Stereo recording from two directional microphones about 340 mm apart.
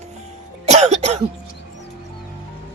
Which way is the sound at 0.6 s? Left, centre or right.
Centre.